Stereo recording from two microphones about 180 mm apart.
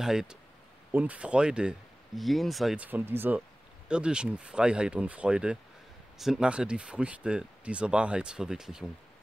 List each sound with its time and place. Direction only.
0.0 s speech: 5° right (ahead or behind)